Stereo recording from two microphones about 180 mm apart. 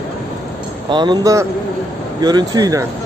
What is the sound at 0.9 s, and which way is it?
A man's voice, 25° right (ahead or behind).